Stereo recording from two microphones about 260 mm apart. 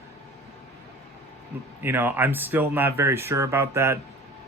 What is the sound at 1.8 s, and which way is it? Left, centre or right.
Speech, centre.